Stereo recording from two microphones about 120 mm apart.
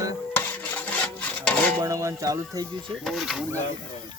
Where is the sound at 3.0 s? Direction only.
Centre (ahead or behind).